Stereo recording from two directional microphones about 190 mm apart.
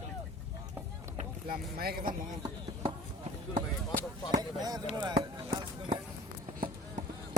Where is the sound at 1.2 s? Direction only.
50° right (ahead or behind).